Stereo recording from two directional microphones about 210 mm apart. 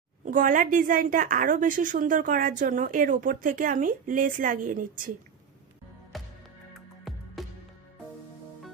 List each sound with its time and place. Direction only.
0.3 s a woman's voice: 40° right (ahead or behind)
6.1 s music: centre (ahead or behind)